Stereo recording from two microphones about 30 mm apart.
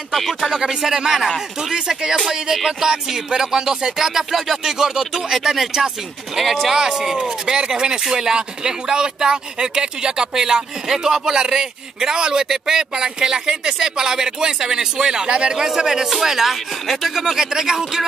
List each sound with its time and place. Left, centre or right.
0.1 s speech: centre
0.5 s speech: centre
2.5 s speech: centre
6.8 s speech: centre
15.5 s speech: centre